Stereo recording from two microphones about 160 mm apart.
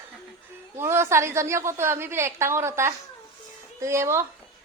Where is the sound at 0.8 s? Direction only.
15° right (ahead or behind).